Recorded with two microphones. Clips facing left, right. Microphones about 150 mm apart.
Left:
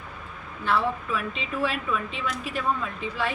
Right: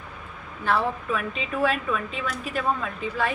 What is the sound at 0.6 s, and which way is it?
A woman's voice, 50° right (ahead or behind).